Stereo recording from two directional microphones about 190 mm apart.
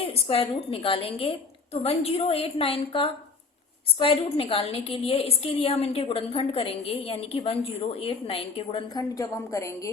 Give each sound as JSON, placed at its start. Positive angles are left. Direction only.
{"t": 0.1, "sound": "a woman's voice", "side_deg": 30}